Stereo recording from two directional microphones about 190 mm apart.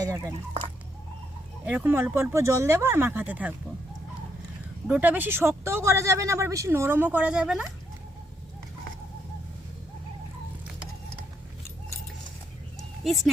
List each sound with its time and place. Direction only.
0.0 s speech: 15° right (ahead or behind)
1.6 s speech: 10° right (ahead or behind)
4.9 s speech: 10° right (ahead or behind)